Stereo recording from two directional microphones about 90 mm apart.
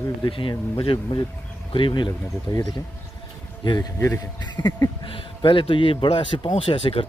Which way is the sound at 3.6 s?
50° left (ahead or behind).